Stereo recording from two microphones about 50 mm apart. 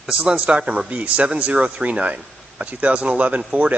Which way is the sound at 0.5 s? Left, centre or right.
Right.